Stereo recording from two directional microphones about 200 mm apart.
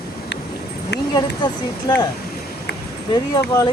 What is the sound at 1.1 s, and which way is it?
Speech, 20° left (ahead or behind).